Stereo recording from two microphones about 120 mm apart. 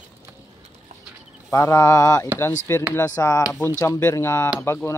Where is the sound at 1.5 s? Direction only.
25° left (ahead or behind).